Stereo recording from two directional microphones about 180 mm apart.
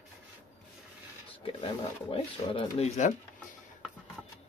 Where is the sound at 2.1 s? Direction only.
30° left (ahead or behind).